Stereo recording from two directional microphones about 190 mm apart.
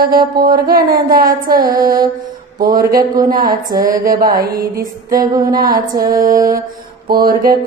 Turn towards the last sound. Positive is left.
turn(degrees=-50)  # may be behind; listen again after turning